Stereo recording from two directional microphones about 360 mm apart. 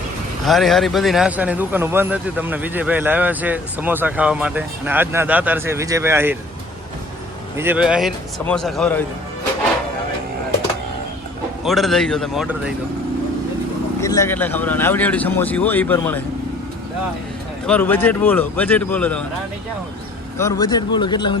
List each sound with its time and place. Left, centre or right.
0.4 s speech: centre
7.5 s speech: centre
11.6 s speech: centre
14.0 s speech: centre
17.7 s speech: centre
20.4 s speech: centre